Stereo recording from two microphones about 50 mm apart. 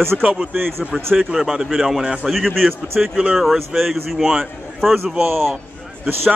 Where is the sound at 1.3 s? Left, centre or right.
Centre.